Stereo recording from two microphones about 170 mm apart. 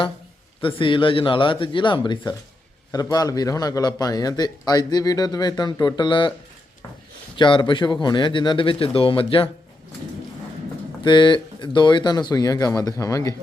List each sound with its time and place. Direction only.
0.6 s a man's voice: 30° left (ahead or behind)
7.3 s a man's voice: 25° left (ahead or behind)
11.0 s a man's voice: 25° left (ahead or behind)